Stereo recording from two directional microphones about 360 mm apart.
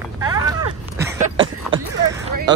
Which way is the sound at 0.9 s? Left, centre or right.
Centre.